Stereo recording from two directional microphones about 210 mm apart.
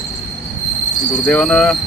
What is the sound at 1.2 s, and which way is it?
Speech, 5° left (ahead or behind).